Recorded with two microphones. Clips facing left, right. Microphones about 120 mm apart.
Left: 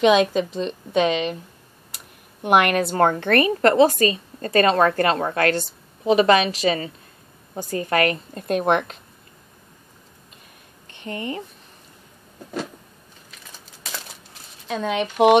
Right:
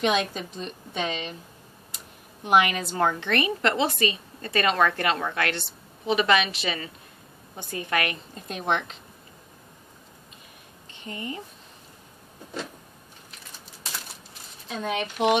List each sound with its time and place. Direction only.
0.0 s a woman's voice: 90° left
2.4 s a woman's voice: 60° left (ahead or behind); by 8.2 s 40° left (ahead or behind)
8.4 s speech: 55° left (ahead or behind)
10.9 s speech: 65° left (ahead or behind)
14.7 s speech: 90° left; by 15.3 s 70° left (ahead or behind)